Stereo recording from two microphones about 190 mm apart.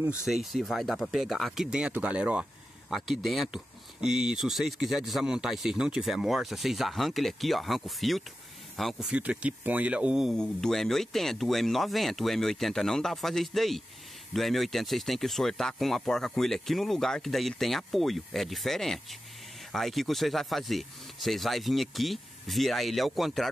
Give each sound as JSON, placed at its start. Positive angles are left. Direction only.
{"t": 0.2, "sound": "speech", "side_deg": 0}